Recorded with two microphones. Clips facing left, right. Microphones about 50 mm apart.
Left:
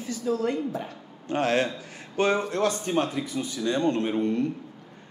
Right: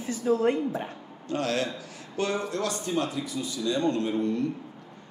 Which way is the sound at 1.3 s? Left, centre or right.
Left.